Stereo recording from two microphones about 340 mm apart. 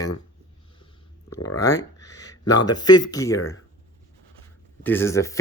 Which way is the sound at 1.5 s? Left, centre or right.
Centre.